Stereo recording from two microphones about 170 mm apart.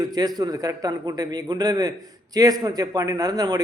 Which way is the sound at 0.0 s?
25° right (ahead or behind).